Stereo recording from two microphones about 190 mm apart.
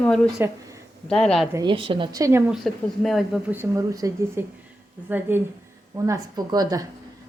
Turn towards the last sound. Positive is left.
turn(degrees=-20)  # may be behind; listen again after turning